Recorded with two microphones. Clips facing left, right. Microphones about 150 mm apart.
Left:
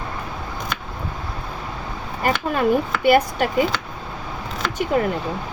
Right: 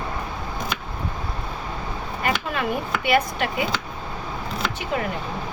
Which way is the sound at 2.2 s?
40° left (ahead or behind).